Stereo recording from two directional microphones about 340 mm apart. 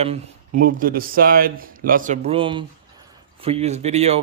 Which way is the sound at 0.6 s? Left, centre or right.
Right.